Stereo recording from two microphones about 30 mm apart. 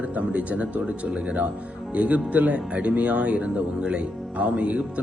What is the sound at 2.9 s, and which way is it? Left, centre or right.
Speech, right.